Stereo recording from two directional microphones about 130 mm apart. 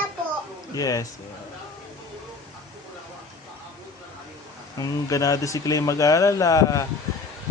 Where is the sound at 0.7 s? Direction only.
25° left (ahead or behind).